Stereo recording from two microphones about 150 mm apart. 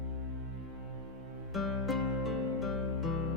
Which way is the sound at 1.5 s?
Centre (ahead or behind).